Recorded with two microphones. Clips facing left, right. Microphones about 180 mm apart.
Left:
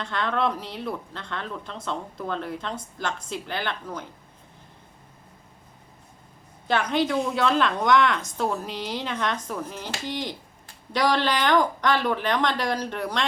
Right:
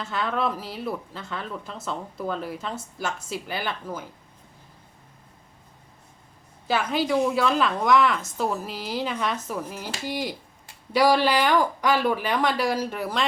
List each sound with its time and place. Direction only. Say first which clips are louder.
0.0 s a woman's voice: left 1 dB; 5° right (ahead or behind)
6.7 s a woman's voice: even; 5° right (ahead or behind)